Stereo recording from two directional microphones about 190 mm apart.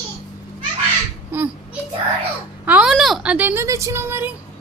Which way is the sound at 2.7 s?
5° right (ahead or behind).